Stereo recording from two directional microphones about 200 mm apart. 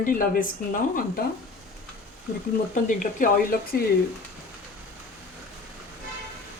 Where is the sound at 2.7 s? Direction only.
40° left (ahead or behind).